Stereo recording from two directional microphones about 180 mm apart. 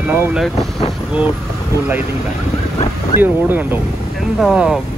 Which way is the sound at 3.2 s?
10° right (ahead or behind).